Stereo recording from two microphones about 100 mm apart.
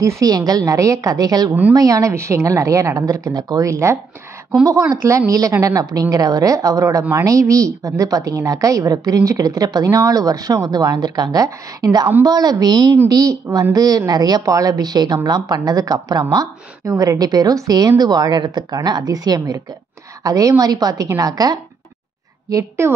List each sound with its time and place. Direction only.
0.0 s a woman's voice: 35° right (ahead or behind)
3.7 s speech: 30° right (ahead or behind)
5.0 s a woman's voice: 30° right (ahead or behind)